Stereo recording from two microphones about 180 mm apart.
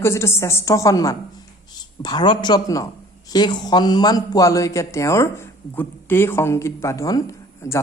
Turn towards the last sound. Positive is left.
turn(degrees=15)  # may be behind; listen again after turning